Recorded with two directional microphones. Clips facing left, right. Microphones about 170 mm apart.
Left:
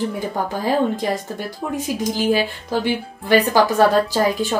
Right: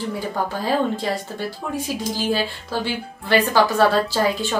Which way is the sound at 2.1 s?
15° left (ahead or behind).